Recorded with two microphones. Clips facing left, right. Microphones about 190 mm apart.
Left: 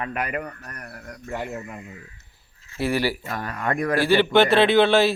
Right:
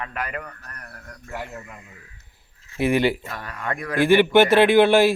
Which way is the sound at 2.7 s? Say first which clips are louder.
Right 4 dB; 20° right (ahead or behind).